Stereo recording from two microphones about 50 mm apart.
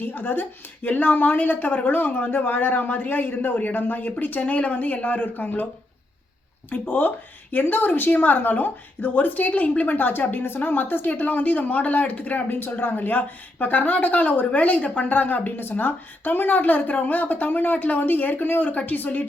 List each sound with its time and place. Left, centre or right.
0.0 s a woman's voice: left
6.7 s a woman's voice: left
12.5 s a woman's voice: left
15.1 s a woman's voice: left